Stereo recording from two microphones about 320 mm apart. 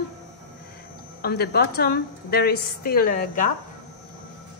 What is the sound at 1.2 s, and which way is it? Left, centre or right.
A woman's voice, left.